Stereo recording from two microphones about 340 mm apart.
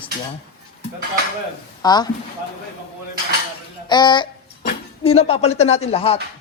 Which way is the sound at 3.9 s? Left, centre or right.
Centre.